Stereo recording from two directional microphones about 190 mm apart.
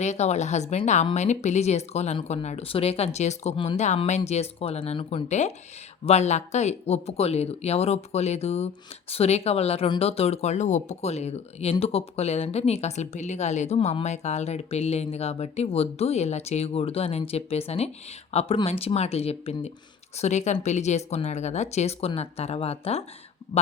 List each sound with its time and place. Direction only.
0.0 s speech: 35° left (ahead or behind)